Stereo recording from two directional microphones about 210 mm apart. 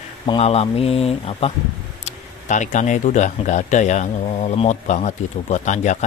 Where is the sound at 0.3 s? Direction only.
30° left (ahead or behind).